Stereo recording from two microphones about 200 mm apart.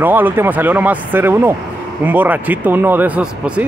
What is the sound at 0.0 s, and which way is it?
Speech, 10° right (ahead or behind).